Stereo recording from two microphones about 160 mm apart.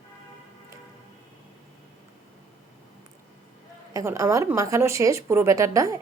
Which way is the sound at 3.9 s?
20° right (ahead or behind).